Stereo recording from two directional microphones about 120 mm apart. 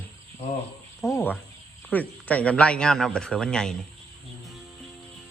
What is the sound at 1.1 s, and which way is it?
Speech, 15° left (ahead or behind).